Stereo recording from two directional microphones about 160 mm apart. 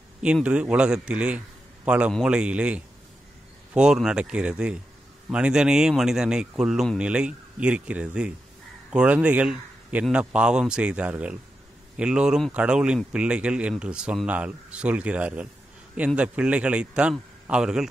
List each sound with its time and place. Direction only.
0.2 s speech: 5° right (ahead or behind)